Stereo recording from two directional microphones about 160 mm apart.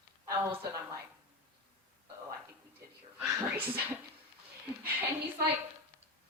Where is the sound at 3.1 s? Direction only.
15° right (ahead or behind).